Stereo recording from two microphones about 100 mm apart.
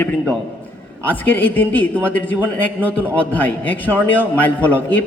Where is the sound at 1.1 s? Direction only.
20° left (ahead or behind).